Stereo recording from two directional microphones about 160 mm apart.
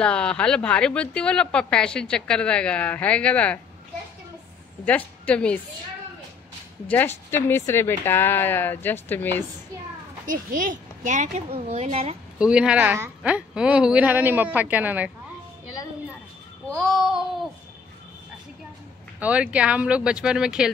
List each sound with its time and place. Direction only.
0.0 s speech: 5° left (ahead or behind)
4.8 s speech: 10° left (ahead or behind)
6.9 s speech: 15° left (ahead or behind)
10.2 s a woman's voice: 55° right (ahead or behind); by 12.2 s 40° right (ahead or behind)
12.4 s speech: 5° right (ahead or behind)
16.6 s a sound: centre (ahead or behind)
19.1 s speech: 10° right (ahead or behind)